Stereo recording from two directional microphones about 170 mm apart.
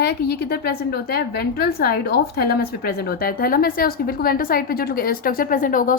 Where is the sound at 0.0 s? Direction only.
65° left (ahead or behind).